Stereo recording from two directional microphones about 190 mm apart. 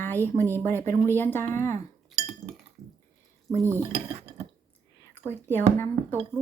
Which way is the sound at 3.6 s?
15° right (ahead or behind).